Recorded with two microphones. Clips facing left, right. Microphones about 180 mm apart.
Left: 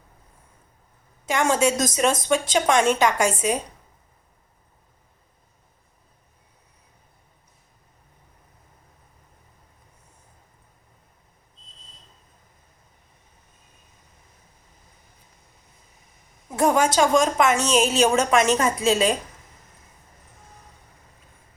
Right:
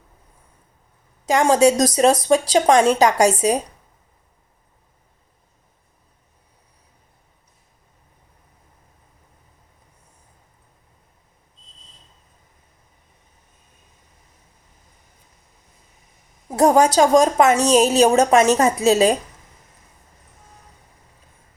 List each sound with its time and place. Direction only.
1.2 s a woman's voice: 35° right (ahead or behind)
16.5 s a woman's voice: 35° right (ahead or behind)